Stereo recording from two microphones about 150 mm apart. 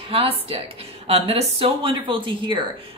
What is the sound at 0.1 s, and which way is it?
Speech, 40° right (ahead or behind).